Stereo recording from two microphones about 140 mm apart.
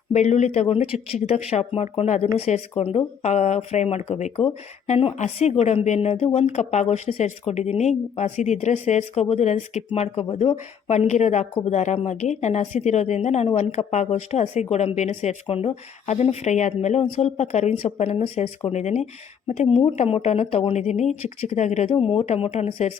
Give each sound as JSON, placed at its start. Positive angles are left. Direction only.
{"t": 0.1, "sound": "a woman's voice", "side_deg": 55}
{"t": 21.9, "sound": "a woman's voice", "side_deg": 40}